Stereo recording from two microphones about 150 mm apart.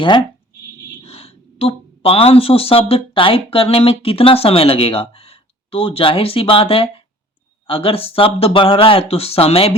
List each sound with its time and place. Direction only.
1.0 s speech: 40° left (ahead or behind)